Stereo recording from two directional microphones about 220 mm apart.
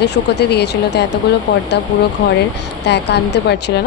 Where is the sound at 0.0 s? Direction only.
50° left (ahead or behind).